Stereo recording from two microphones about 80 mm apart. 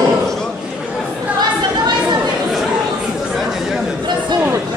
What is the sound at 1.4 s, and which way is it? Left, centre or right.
Chatter, right.